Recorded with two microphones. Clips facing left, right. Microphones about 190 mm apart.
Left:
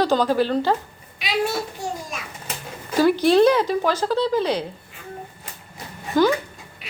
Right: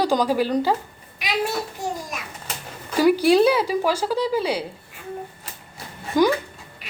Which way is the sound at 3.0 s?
10° right (ahead or behind).